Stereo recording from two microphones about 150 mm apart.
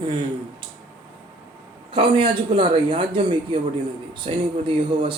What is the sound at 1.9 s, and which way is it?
Speech, 35° right (ahead or behind).